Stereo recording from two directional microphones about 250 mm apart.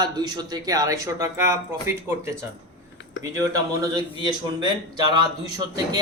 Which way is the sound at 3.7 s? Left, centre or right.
Centre.